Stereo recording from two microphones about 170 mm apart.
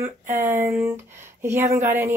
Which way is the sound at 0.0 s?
15° right (ahead or behind).